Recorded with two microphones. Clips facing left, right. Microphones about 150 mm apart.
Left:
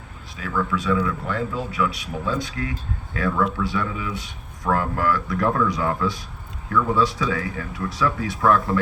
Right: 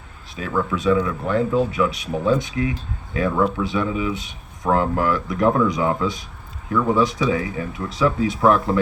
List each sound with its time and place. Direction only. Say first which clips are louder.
0.3 s speech: right 2 dB; 25° right (ahead or behind)